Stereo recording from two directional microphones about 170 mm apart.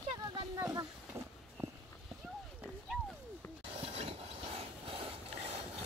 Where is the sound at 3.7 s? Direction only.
35° right (ahead or behind).